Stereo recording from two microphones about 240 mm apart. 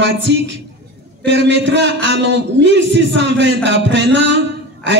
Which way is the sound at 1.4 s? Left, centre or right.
Right.